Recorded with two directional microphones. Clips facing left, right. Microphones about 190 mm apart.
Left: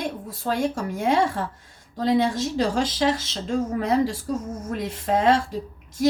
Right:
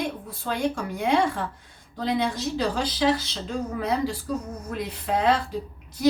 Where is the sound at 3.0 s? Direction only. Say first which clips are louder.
Even; 45° left (ahead or behind).